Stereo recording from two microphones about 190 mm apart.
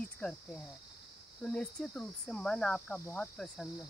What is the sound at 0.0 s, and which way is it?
Speech, 5° left (ahead or behind).